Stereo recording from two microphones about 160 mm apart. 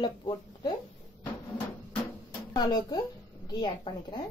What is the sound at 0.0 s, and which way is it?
Speech, 25° left (ahead or behind).